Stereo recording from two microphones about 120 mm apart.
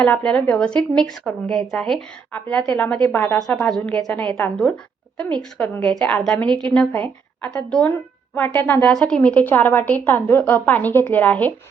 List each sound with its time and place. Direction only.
0.0 s a woman's voice: 10° left (ahead or behind)